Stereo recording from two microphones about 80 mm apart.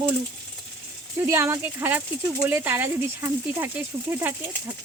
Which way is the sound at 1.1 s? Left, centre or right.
Right.